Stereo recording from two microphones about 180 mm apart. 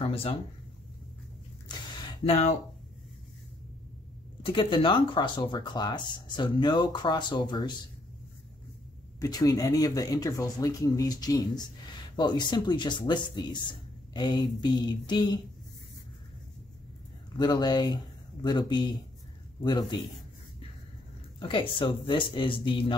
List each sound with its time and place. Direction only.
0.0 s a sound: 35° left (ahead or behind)
2.2 s speech: 35° left (ahead or behind)
4.5 s speech: 30° left (ahead or behind)
9.2 s speech: 20° left (ahead or behind)
17.4 s speech: 25° left (ahead or behind)
21.4 s speech: 25° left (ahead or behind)